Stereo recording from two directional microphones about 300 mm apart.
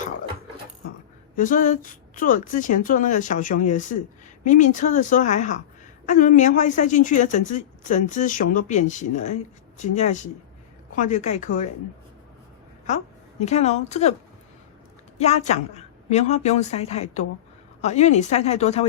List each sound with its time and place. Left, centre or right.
1.4 s a woman's voice: left
13.4 s a woman's voice: left
15.2 s a woman's voice: left